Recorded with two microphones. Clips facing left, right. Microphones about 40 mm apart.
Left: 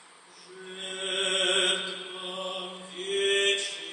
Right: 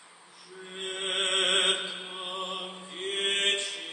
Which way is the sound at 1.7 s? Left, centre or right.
Centre.